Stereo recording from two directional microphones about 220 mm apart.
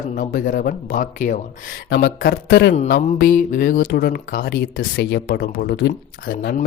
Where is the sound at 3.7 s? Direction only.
50° left (ahead or behind).